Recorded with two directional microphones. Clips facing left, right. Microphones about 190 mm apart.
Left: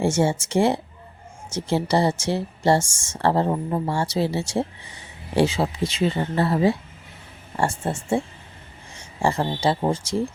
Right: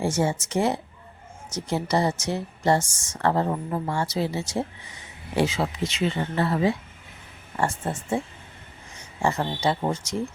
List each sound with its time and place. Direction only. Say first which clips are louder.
0.0 s speech: left 3 dB; 25° left (ahead or behind)
9.2 s speech: left 2 dB; 30° left (ahead or behind)